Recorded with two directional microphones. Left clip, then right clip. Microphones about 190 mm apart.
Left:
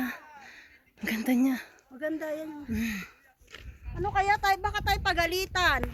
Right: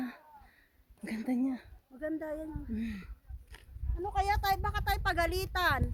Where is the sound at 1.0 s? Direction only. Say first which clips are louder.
Left 7 dB; 5° left (ahead or behind).